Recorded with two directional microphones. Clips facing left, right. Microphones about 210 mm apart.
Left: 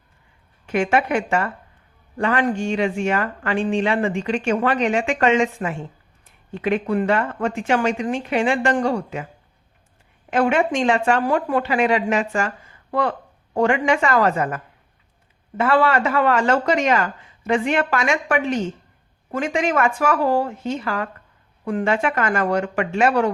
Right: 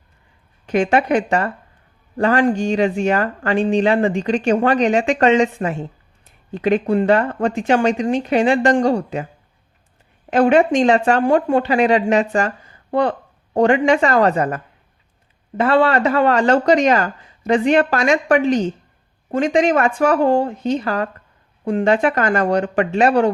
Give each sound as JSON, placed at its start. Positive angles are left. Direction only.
{"t": 0.6, "sound": "speech", "side_deg": -35}
{"t": 10.2, "sound": "speech", "side_deg": -35}